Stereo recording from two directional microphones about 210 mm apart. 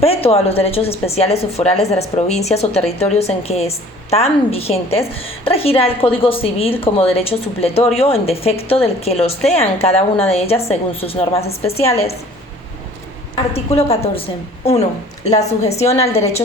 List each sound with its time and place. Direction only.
0.0 s a woman's voice: 30° left (ahead or behind)
13.3 s a woman's voice: 30° left (ahead or behind)